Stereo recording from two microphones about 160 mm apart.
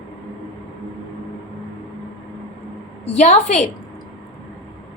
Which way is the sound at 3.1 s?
45° left (ahead or behind).